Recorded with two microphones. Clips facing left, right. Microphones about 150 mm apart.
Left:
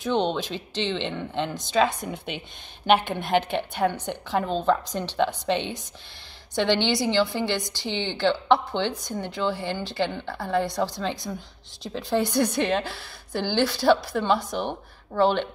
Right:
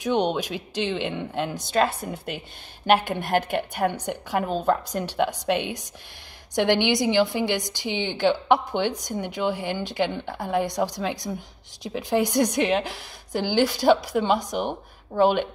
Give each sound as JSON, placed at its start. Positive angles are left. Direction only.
{"t": 0.0, "sound": "a woman's voice", "side_deg": -15}